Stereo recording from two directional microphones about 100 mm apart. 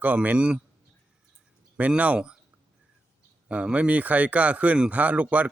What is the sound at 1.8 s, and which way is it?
Speech, 15° right (ahead or behind).